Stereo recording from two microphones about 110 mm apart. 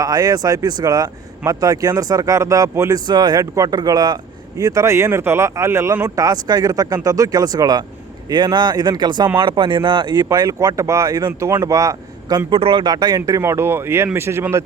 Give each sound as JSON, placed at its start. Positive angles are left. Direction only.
{"t": 0.0, "sound": "speech", "side_deg": -35}
{"t": 6.2, "sound": "speech", "side_deg": -35}
{"t": 12.5, "sound": "speech", "side_deg": -55}
{"t": 12.8, "sound": "speech", "side_deg": -40}